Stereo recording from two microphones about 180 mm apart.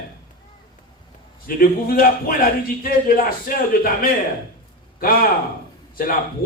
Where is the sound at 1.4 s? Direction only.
55° left (ahead or behind).